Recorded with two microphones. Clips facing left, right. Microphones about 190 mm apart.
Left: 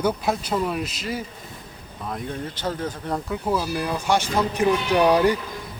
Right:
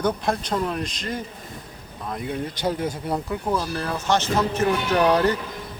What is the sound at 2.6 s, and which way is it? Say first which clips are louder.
Speech: right 3 dB; 15° right (ahead or behind).